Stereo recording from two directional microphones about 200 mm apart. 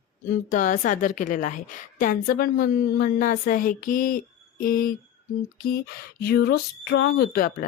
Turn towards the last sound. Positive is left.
turn(degrees=45)  # may be behind; listen again after turning